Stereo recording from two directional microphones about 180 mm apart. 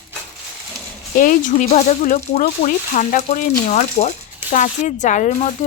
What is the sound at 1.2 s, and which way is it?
Speech, 45° left (ahead or behind).